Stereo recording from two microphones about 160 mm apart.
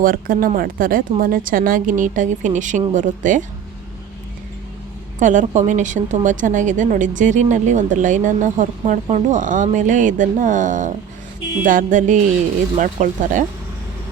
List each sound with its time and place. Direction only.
0.0 s a woman's voice: 60° right (ahead or behind)
5.2 s a woman's voice: 50° right (ahead or behind)